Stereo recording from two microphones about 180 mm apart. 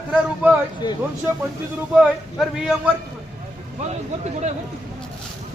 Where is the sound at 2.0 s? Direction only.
Centre (ahead or behind).